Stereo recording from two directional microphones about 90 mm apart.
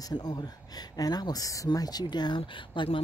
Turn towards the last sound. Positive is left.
turn(degrees=65)  # may be behind; listen again after turning